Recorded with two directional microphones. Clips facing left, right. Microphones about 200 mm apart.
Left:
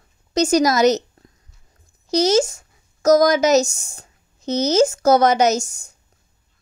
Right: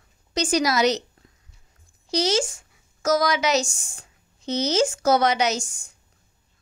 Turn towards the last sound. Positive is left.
turn(degrees=40)  # may be behind; listen again after turning